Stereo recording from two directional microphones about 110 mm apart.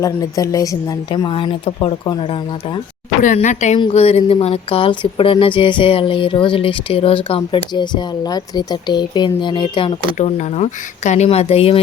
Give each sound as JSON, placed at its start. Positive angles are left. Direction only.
{"t": 0.0, "sound": "a woman's voice", "side_deg": 30}
{"t": 1.1, "sound": "speech", "side_deg": 50}
{"t": 3.3, "sound": "speech", "side_deg": 90}
{"t": 3.9, "sound": "speech", "side_deg": 65}
{"t": 10.2, "sound": "speech", "side_deg": 90}